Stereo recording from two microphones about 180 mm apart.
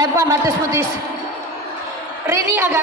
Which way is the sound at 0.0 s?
15° right (ahead or behind).